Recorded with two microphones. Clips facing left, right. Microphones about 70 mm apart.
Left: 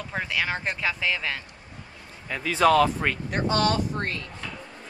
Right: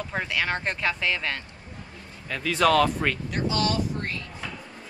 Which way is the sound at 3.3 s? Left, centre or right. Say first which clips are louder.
Left 2 dB; left.